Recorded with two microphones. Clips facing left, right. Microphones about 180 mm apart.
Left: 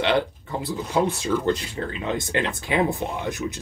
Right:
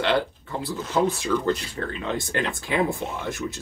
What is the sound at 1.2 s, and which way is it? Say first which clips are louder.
Speech: left 1 dB; 25° left (ahead or behind).